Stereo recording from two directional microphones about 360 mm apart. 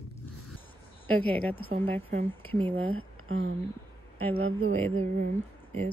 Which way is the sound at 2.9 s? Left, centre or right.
Right.